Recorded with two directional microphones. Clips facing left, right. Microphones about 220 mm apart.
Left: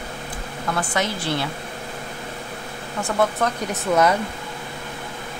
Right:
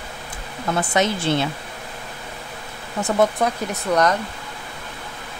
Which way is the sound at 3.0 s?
20° right (ahead or behind).